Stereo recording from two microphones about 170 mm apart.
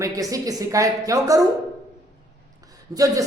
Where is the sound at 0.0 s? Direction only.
20° right (ahead or behind).